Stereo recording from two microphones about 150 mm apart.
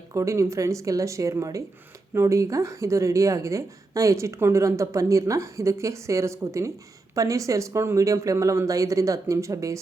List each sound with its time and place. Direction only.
0.1 s speech: 20° right (ahead or behind)